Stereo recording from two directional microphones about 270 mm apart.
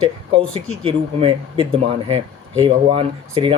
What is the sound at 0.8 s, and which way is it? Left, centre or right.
Speech, centre.